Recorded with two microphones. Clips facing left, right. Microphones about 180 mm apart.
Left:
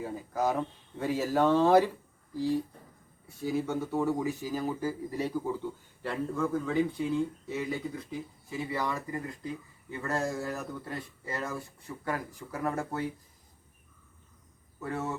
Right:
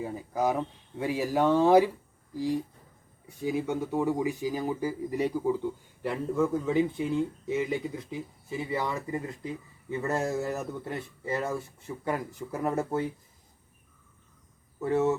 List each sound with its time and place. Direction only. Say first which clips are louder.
0.0 s speech: right 2 dB; 15° right (ahead or behind)
14.8 s speech: right 9 dB; 25° right (ahead or behind)